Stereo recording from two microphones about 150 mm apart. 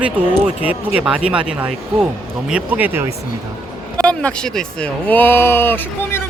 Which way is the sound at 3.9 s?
5° left (ahead or behind).